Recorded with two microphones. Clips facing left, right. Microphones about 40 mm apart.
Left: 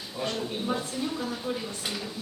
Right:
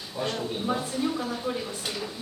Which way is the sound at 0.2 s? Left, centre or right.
Centre.